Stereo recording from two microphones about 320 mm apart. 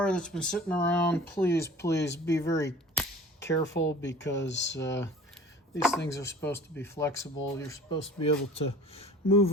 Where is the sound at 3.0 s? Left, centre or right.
Centre.